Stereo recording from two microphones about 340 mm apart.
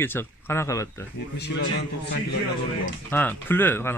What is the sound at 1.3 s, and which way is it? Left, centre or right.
Speech, left.